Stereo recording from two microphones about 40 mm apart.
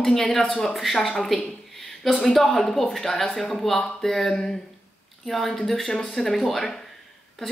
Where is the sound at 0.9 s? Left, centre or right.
Centre.